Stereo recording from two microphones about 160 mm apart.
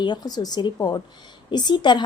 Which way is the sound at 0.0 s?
25° left (ahead or behind).